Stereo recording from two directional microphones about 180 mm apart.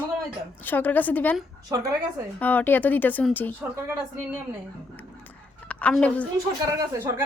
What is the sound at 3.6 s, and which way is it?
Speech, 10° right (ahead or behind).